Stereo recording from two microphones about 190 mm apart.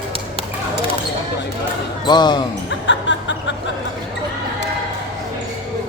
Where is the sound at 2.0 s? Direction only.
25° left (ahead or behind).